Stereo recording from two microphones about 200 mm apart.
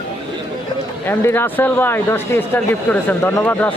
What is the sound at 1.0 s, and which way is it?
Speech, 10° left (ahead or behind).